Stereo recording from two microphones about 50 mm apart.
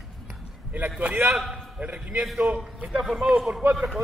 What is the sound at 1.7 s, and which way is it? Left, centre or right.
Speech, right.